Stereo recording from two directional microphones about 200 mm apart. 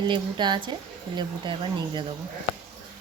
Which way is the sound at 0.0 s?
20° right (ahead or behind).